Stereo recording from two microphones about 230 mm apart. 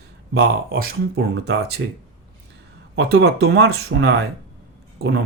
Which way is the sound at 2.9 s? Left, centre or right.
Right.